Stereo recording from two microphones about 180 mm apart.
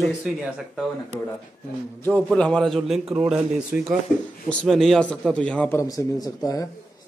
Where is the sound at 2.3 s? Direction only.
5° left (ahead or behind); by 6.6 s 20° left (ahead or behind).